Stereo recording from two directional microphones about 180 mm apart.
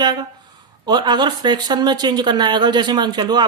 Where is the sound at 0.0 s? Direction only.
25° right (ahead or behind).